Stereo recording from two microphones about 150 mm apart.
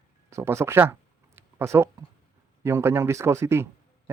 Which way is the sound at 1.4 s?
15° right (ahead or behind).